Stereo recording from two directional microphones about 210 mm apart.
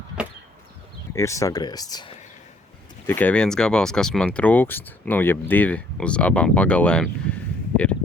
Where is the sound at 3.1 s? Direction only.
5° left (ahead or behind).